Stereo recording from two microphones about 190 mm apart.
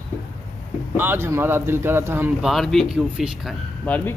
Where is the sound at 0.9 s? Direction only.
10° right (ahead or behind).